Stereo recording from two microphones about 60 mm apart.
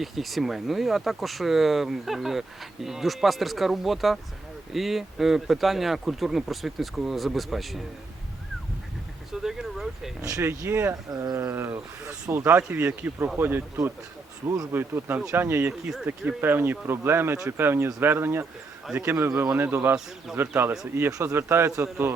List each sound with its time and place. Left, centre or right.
0.0 s speech: centre
9.4 s speech: centre
9.7 s a sound: centre
10.2 s speech: right
10.4 s speech: right
12.7 s speech: right
14.4 s speech: right
14.7 s speech: right
20.3 s speech: centre
21.1 s speech: right
21.3 s speech: right